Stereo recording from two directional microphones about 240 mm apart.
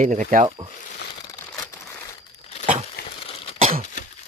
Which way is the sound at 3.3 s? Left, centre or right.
Left.